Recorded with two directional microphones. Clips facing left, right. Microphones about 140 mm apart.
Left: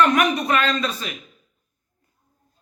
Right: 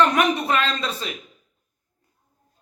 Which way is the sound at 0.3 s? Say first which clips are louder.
Left 2 dB; 25° right (ahead or behind).